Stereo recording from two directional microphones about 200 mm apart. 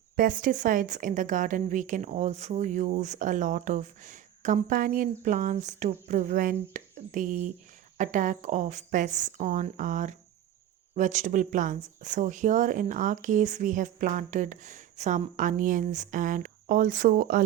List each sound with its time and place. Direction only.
0.2 s a woman's voice: 45° right (ahead or behind)